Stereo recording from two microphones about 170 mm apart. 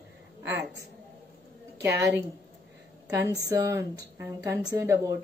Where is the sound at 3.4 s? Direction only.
20° right (ahead or behind).